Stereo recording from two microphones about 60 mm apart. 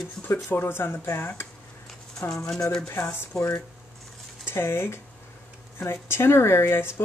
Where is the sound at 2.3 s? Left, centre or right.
Centre.